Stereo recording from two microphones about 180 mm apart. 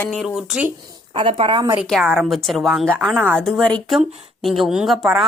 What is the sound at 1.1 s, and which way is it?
Speech, 30° right (ahead or behind).